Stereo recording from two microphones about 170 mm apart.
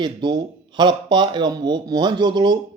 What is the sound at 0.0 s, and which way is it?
Speech, 25° right (ahead or behind).